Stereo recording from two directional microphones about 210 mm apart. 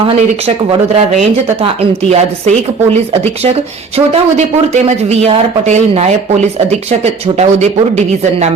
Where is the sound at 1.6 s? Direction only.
30° right (ahead or behind).